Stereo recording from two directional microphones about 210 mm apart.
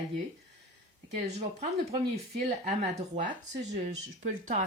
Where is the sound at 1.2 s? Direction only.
30° right (ahead or behind).